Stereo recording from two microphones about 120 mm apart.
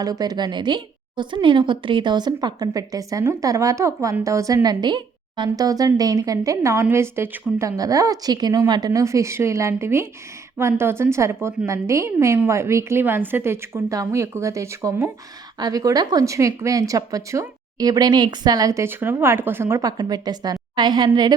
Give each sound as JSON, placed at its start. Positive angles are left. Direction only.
{"t": 0.0, "sound": "a woman's voice", "side_deg": -30}